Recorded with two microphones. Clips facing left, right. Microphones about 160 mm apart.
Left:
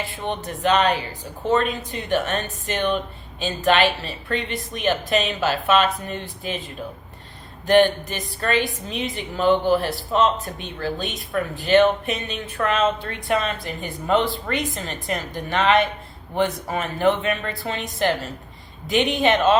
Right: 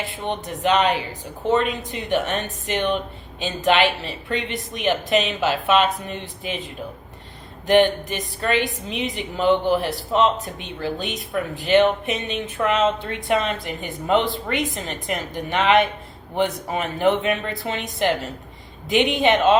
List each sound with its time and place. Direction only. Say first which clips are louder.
0.3 s speech: even; 20° right (ahead or behind)
7.7 s speech: even; 20° right (ahead or behind)